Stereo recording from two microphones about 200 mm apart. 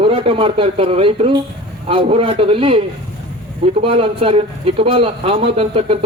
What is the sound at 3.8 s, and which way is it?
Speech, 30° right (ahead or behind).